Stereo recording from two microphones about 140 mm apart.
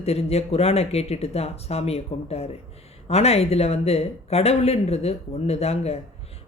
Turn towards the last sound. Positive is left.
turn(degrees=50)  # may be behind; listen again after turning